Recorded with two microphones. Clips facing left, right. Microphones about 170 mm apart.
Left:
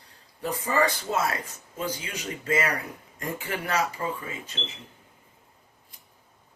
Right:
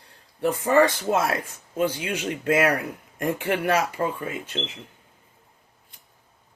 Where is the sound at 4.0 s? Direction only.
50° right (ahead or behind).